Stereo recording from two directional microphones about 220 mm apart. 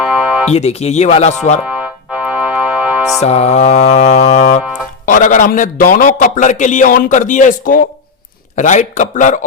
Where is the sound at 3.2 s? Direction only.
30° left (ahead or behind).